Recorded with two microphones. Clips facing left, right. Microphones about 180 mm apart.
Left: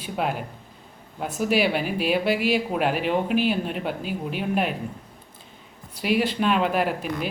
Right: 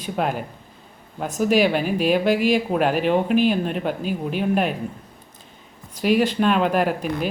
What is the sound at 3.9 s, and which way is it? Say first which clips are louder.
Speech: right 4 dB; 45° right (ahead or behind).